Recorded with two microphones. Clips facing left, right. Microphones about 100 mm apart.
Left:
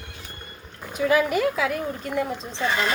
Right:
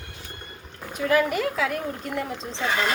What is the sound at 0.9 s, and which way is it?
Speech, 5° left (ahead or behind).